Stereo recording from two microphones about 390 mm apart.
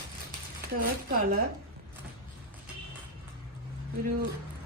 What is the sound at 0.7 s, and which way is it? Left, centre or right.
Speech, right.